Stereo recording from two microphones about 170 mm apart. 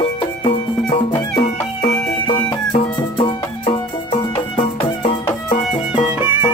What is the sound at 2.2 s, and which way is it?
Music, 30° left (ahead or behind).